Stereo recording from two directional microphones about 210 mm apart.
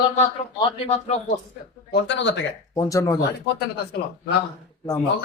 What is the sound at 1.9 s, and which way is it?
Speech, 55° left (ahead or behind).